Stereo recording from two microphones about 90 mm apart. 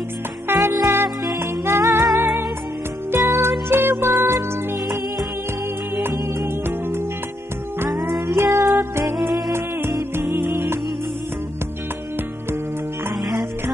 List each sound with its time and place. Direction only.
0.5 s music: 30° right (ahead or behind)
6.0 s music: 25° right (ahead or behind)
8.0 s music: centre (ahead or behind)
8.4 s music: 30° right (ahead or behind)
10.1 s music: 25° right (ahead or behind)